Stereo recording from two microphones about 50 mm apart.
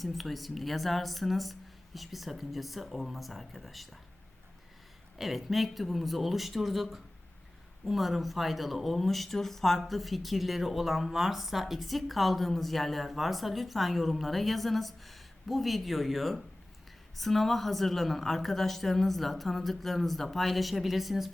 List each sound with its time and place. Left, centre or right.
0.0 s speech: centre
5.1 s speech: centre